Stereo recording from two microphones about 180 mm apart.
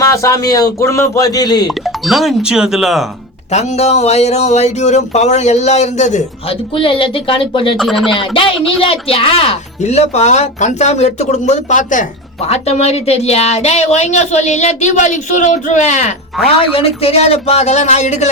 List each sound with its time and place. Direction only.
0.0 s speech: 15° left (ahead or behind)
2.0 s speech: centre (ahead or behind)
3.5 s speech: 35° left (ahead or behind)
6.7 s speech: 30° left (ahead or behind)
7.8 s speech: centre (ahead or behind)
8.1 s speech: 30° left (ahead or behind)